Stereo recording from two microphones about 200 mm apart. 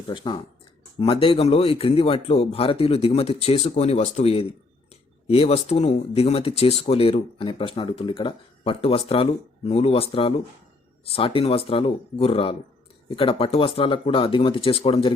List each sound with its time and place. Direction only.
0.1 s speech: 25° left (ahead or behind)